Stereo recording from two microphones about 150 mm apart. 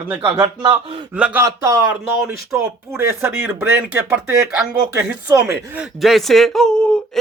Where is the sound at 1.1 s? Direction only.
10° right (ahead or behind).